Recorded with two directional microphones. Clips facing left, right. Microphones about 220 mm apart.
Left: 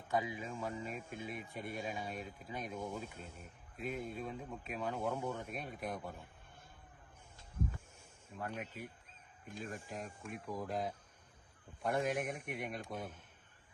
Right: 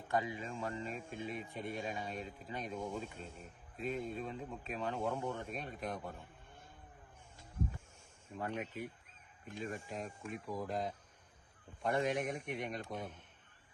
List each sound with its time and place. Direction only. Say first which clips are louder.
0.1 s speech: even; 10° left (ahead or behind)
8.4 s a man's voice: right 3 dB; centre (ahead or behind)